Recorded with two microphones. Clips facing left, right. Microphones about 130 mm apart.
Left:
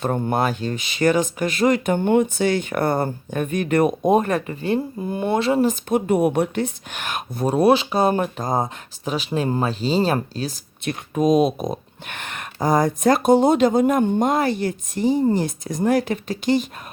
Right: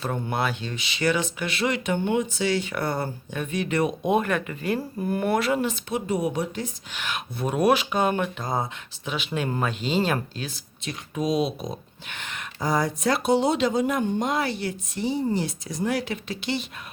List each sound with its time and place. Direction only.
0.0 s speech: 45° left (ahead or behind)
5.6 s speech: 55° left (ahead or behind); by 10.6 s 35° left (ahead or behind)
10.8 s speech: 50° left (ahead or behind)